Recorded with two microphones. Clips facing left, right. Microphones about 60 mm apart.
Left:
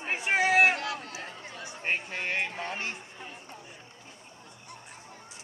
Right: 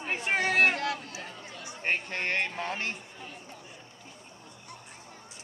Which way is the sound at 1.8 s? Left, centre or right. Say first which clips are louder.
Right 1 dB; right.